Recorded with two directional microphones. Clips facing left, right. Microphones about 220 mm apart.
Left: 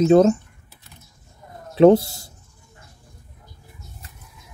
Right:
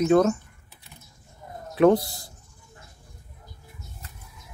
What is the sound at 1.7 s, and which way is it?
Speech, 30° left (ahead or behind).